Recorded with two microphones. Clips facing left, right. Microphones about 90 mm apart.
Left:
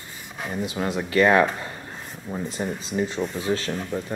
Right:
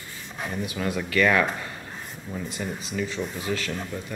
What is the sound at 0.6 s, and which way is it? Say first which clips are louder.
Speech: left 3 dB; 25° left (ahead or behind).